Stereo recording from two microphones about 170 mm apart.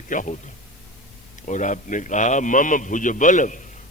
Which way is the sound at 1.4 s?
45° left (ahead or behind).